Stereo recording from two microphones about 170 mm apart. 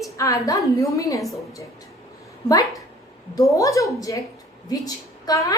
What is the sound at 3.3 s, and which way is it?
A woman's voice, 20° left (ahead or behind).